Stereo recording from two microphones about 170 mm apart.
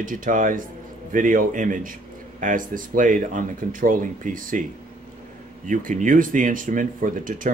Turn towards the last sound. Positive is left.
turn(degrees=-55)  # may be behind; listen again after turning